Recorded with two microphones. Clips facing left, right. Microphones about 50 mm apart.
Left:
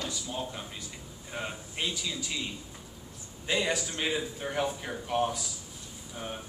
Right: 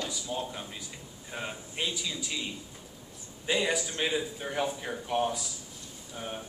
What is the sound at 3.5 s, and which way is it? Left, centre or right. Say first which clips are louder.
Speech: right 1 dB; centre.